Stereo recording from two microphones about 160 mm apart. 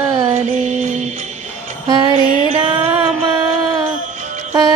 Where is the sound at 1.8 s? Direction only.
30° right (ahead or behind).